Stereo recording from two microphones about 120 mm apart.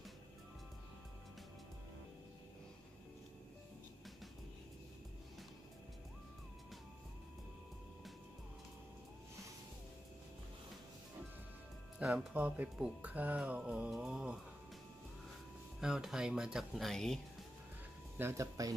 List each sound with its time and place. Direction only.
12.0 s speech: 5° right (ahead or behind)
15.8 s speech: 5° right (ahead or behind)
18.1 s speech: 20° right (ahead or behind)